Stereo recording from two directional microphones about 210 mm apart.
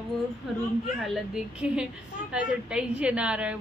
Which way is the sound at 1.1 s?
5° right (ahead or behind).